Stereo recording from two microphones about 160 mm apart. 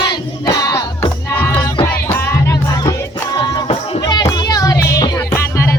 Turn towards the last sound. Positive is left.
turn(degrees=15)  # may be behind; listen again after turning